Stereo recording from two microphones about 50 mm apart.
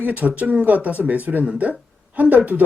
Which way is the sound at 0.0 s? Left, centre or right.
Right.